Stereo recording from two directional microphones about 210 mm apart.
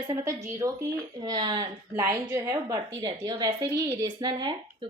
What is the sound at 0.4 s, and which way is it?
A woman's voice, 15° right (ahead or behind).